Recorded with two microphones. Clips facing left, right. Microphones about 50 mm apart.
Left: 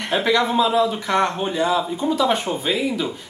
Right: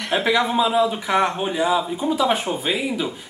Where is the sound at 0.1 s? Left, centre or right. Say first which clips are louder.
Left 1 dB; centre.